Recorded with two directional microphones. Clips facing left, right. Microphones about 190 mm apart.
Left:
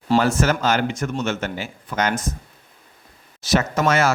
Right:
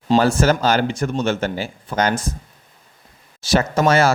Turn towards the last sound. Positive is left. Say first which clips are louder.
# right 3 dB
turn(degrees=-30)  # may be behind; listen again after turning